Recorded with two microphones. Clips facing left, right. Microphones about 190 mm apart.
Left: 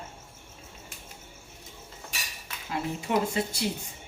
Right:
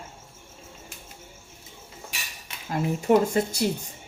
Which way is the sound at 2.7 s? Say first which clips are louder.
Right 7 dB; 45° right (ahead or behind).